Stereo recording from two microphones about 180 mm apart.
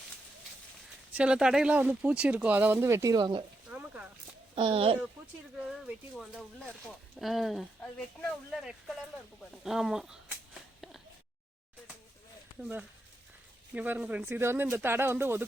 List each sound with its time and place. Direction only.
1.1 s speech: 5° right (ahead or behind); by 3.4 s 25° right (ahead or behind)
3.7 s a sound: 5° right (ahead or behind)
4.5 s speech: 30° right (ahead or behind)
5.5 s speech: centre (ahead or behind)
9.4 s a sound: centre (ahead or behind)
12.5 s speech: 10° right (ahead or behind)